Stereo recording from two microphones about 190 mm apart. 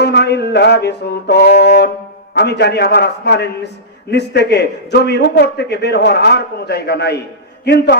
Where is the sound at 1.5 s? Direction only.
60° left (ahead or behind).